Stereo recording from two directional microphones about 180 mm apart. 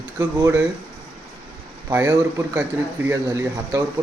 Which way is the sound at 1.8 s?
15° right (ahead or behind).